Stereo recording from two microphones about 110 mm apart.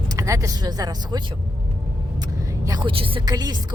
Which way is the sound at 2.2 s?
35° right (ahead or behind).